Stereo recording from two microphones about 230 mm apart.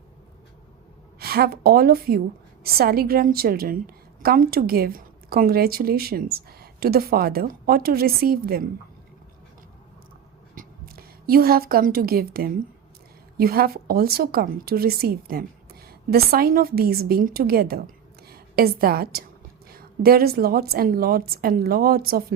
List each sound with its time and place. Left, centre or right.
1.2 s a woman's voice: right
10.5 s a woman's voice: right